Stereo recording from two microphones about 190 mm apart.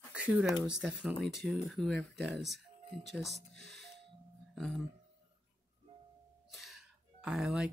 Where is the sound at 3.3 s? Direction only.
60° right (ahead or behind).